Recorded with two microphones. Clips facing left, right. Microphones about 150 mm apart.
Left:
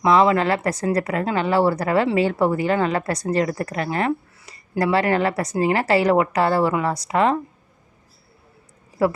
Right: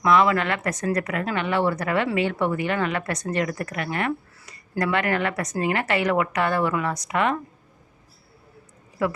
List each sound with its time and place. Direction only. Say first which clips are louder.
0.0 s speech: left 3 dB; 30° left (ahead or behind)
9.0 s speech: left 5 dB; 35° left (ahead or behind)